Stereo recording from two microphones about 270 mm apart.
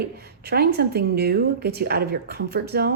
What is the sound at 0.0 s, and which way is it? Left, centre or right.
Speech, right.